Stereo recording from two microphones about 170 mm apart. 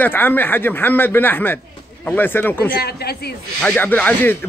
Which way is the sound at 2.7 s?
70° left (ahead or behind).